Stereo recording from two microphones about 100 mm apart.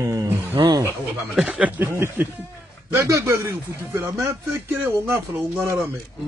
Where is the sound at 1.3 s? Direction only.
10° right (ahead or behind).